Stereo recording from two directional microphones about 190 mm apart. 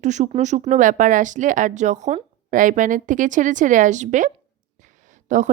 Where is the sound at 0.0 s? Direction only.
40° right (ahead or behind).